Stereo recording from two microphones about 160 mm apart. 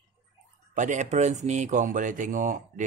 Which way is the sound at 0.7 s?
50° right (ahead or behind).